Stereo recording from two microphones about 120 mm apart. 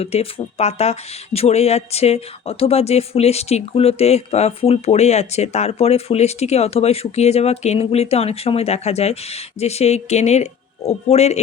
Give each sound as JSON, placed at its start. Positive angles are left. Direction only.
{"t": 0.0, "sound": "speech", "side_deg": 55}